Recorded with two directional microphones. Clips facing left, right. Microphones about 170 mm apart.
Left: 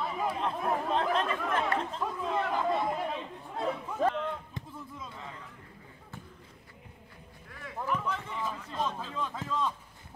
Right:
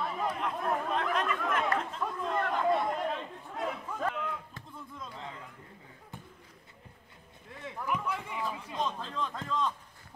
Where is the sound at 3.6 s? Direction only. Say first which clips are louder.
Left 5 dB; 30° left (ahead or behind).